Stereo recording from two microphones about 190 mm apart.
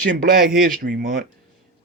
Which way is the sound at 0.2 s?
50° right (ahead or behind).